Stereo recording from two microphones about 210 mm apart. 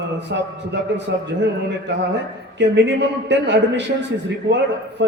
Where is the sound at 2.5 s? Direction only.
55° right (ahead or behind).